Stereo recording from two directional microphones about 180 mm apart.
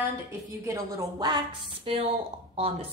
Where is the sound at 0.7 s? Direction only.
20° right (ahead or behind).